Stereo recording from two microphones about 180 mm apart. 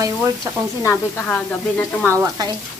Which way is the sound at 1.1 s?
10° left (ahead or behind).